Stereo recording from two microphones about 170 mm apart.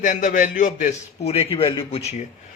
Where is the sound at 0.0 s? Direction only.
45° left (ahead or behind).